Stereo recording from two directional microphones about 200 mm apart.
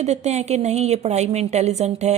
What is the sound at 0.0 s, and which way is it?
A woman's voice, 35° right (ahead or behind).